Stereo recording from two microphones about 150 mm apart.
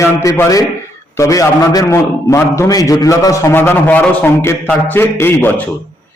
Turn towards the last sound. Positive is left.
turn(degrees=15)  # may be behind; listen again after turning